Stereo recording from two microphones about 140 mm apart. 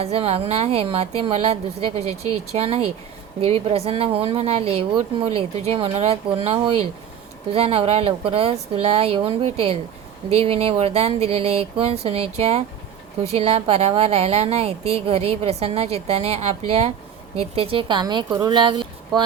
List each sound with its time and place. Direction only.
0.0 s a woman's voice: 45° right (ahead or behind)